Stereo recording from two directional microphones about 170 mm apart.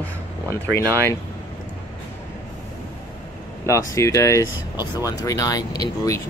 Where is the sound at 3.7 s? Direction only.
15° left (ahead or behind).